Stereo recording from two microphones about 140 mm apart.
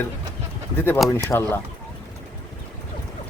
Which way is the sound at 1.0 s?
20° left (ahead or behind).